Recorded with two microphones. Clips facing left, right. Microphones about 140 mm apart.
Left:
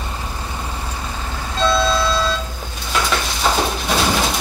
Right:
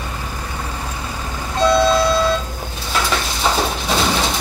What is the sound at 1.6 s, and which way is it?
Vehicle, 15° right (ahead or behind).